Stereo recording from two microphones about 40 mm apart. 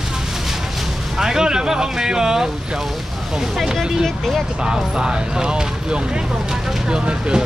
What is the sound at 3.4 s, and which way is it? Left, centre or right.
Speech, centre.